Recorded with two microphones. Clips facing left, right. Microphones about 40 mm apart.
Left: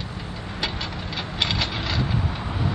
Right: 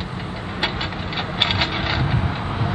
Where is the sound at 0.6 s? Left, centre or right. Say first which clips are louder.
Right 5 dB; right.